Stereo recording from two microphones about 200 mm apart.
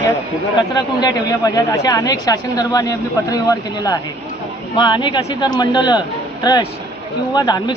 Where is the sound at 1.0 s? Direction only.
20° left (ahead or behind).